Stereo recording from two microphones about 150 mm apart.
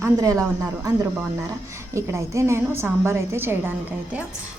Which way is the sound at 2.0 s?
20° right (ahead or behind).